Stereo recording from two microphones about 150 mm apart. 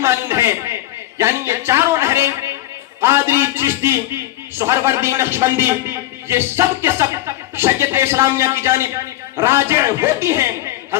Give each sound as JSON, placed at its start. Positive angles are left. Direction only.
{"t": 0.0, "sound": "a man's voice", "side_deg": -15}